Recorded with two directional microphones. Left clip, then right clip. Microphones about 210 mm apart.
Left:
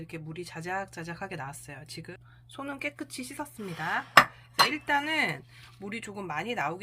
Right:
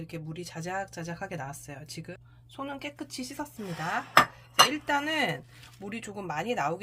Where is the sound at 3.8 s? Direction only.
15° right (ahead or behind).